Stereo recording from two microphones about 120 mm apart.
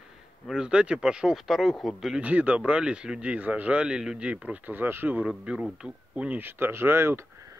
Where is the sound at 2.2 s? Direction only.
10° right (ahead or behind).